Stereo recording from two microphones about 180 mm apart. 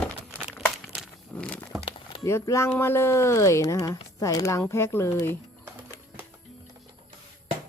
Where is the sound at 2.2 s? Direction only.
15° left (ahead or behind).